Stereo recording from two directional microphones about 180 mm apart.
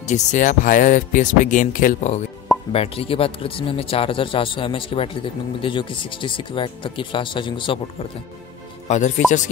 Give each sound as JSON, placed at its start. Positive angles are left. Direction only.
{"t": 0.0, "sound": "speech", "side_deg": 40}
{"t": 2.7, "sound": "speech", "side_deg": 30}
{"t": 8.8, "sound": "speech", "side_deg": 40}